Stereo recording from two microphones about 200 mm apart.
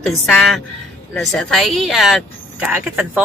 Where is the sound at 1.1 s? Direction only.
Centre (ahead or behind).